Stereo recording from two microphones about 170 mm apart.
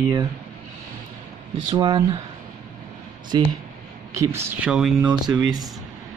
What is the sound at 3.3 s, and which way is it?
Speech, 25° right (ahead or behind).